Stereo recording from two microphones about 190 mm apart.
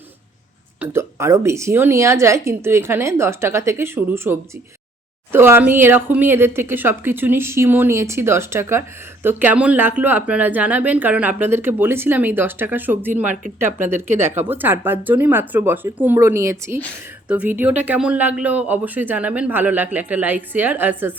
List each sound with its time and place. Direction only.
0.8 s speech: 15° right (ahead or behind)
14.1 s speech: 40° right (ahead or behind)
14.3 s speech: 10° right (ahead or behind)